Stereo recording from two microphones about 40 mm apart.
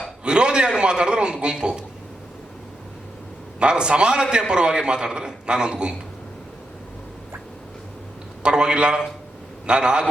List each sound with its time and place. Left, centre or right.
0.3 s a man's voice: right
3.6 s a man's voice: right
8.4 s a man's voice: right